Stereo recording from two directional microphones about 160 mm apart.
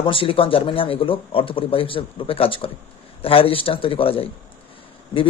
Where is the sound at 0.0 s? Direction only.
35° left (ahead or behind).